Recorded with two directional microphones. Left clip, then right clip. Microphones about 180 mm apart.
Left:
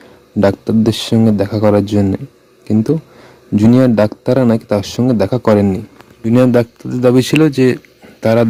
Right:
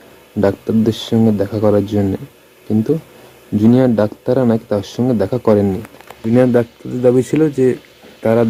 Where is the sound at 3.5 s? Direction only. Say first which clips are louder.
Left 2 dB; 40° left (ahead or behind).